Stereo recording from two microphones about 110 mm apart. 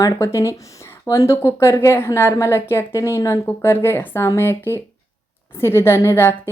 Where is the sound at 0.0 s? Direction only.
25° left (ahead or behind).